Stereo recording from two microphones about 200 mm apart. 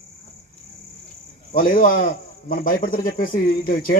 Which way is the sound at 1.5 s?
45° left (ahead or behind).